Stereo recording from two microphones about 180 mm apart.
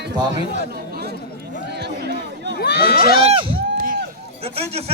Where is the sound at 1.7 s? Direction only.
65° right (ahead or behind).